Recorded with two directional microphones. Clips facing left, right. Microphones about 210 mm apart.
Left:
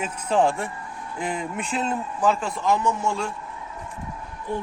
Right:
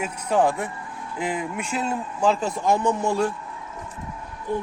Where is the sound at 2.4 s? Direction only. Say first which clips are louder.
Right 2 dB; 45° right (ahead or behind).